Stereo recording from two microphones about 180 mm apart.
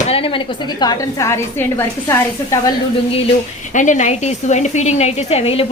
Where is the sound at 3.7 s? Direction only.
45° left (ahead or behind).